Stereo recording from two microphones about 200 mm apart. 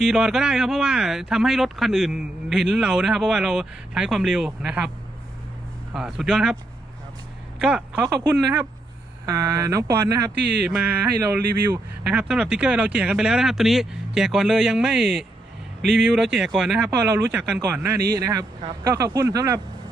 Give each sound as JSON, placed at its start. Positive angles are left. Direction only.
{"t": 0.0, "sound": "speech", "side_deg": 0}
{"t": 5.9, "sound": "speech", "side_deg": -5}
{"t": 7.6, "sound": "speech", "side_deg": -5}
{"t": 10.6, "sound": "speech", "side_deg": -5}